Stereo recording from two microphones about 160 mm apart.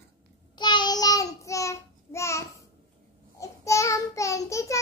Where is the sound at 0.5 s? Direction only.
25° left (ahead or behind).